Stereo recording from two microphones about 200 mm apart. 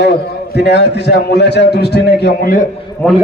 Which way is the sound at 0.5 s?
55° left (ahead or behind).